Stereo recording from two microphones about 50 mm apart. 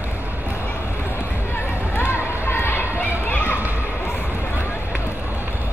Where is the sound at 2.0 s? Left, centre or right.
Left.